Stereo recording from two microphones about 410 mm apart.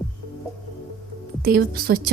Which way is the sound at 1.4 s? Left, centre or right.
Right.